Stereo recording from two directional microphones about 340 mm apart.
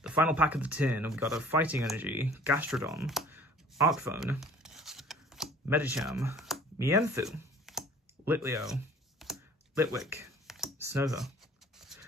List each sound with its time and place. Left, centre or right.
0.0 s speech: centre
9.2 s computer keyboard: centre
11.8 s a sound: centre